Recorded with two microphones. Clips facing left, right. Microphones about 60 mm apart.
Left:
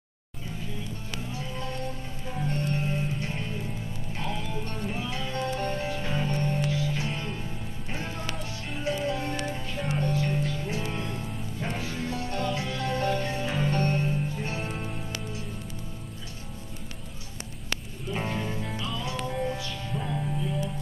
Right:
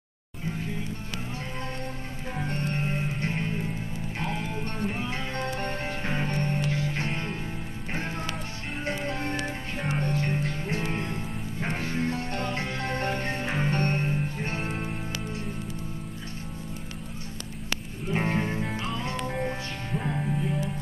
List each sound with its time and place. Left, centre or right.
0.6 s music: right
18.0 s music: right